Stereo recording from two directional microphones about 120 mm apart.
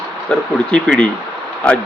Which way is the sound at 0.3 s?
5° left (ahead or behind).